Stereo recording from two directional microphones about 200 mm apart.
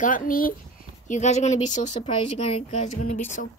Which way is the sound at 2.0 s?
25° left (ahead or behind).